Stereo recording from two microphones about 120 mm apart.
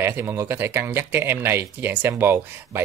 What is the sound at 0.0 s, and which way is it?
Speech, 20° right (ahead or behind).